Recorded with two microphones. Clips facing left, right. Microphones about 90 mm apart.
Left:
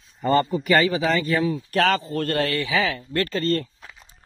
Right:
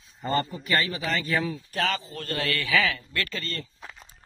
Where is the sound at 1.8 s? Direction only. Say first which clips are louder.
Left 6 dB; 50° left (ahead or behind).